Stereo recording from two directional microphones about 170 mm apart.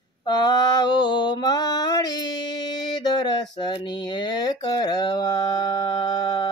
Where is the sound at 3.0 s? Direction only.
25° left (ahead or behind).